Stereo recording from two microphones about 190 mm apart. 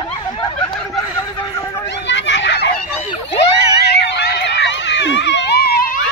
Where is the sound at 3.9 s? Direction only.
60° left (ahead or behind).